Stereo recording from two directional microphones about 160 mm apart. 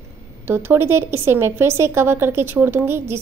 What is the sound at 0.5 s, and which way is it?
A woman's voice, 15° right (ahead or behind).